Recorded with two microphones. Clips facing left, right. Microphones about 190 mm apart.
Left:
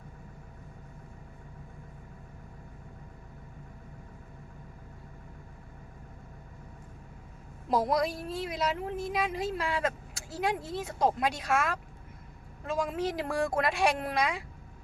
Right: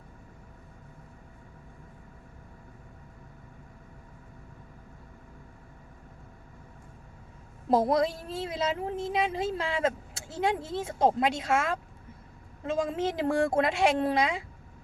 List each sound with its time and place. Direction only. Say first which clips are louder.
7.7 s speech: right 3 dB; 25° right (ahead or behind)